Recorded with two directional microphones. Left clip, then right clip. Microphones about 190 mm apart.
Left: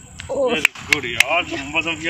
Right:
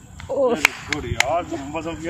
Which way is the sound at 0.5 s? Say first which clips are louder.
Left 5 dB; 15° right (ahead or behind).